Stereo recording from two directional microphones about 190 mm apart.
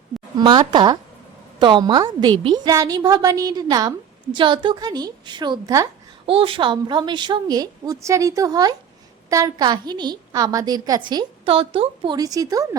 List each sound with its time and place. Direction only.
0.3 s a woman's voice: 20° right (ahead or behind)
6.2 s a woman's voice: 30° right (ahead or behind)